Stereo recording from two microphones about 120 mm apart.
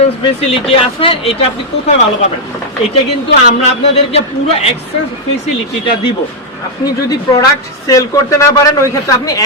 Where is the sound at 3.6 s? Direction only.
55° left (ahead or behind).